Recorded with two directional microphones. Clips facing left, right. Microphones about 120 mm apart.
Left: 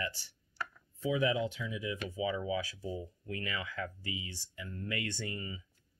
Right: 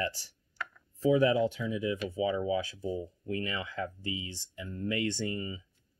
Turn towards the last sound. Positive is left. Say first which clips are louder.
# right 6 dB
turn(degrees=-25)  # may be behind; listen again after turning